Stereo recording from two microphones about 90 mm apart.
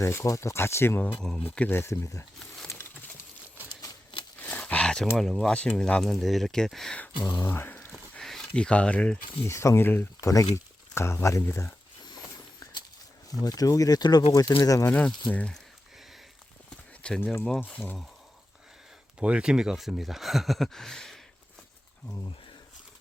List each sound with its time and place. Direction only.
0.0 s speech: 35° left (ahead or behind)
1.8 s speech: 30° left (ahead or behind)
2.6 s a sound: 30° left (ahead or behind)
3.7 s a sound: 45° left (ahead or behind)
4.4 s roaring cats: 15° left (ahead or behind)
5.1 s speech: centre (ahead or behind)
7.4 s speech: 25° left (ahead or behind)
8.1 s a sound: 5° left (ahead or behind)
9.5 s speech: 30° left (ahead or behind)
10.2 s speech: 35° left (ahead or behind)
13.4 s speech: 45° left (ahead or behind)
14.8 s speech: 15° left (ahead or behind)
17.0 s speech: 10° left (ahead or behind)
19.2 s speech: 10° right (ahead or behind); by 21.2 s 5° left (ahead or behind)